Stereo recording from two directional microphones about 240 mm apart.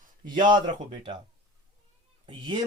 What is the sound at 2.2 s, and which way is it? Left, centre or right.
Speech, centre.